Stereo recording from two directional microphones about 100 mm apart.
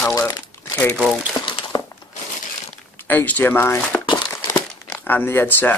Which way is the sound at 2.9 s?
20° left (ahead or behind).